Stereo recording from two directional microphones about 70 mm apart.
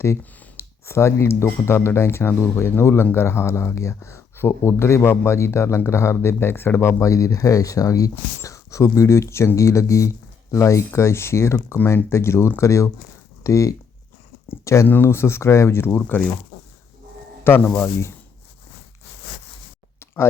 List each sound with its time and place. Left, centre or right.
0.0 s speech: left
14.8 s speech: left
17.5 s speech: left